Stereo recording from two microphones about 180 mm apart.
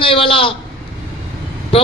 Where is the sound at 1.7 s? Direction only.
30° left (ahead or behind).